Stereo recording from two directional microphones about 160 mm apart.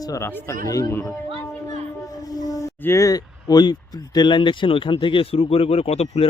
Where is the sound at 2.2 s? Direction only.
25° left (ahead or behind).